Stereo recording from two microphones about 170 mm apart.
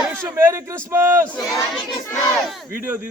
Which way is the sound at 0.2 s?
15° right (ahead or behind).